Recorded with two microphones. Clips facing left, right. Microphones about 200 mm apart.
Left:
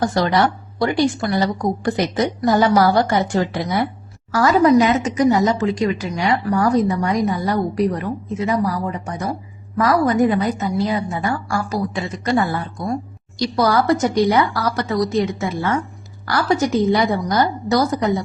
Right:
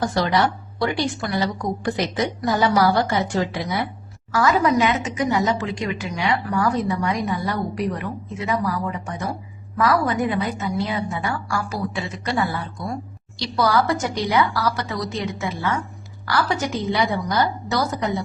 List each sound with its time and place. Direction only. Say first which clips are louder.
0.1 s a woman's voice: left 3 dB; 50° left (ahead or behind)